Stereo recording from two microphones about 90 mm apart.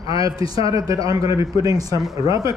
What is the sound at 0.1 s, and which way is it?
A man's voice, 40° right (ahead or behind).